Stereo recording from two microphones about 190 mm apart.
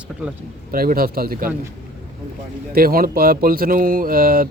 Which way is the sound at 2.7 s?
50° right (ahead or behind).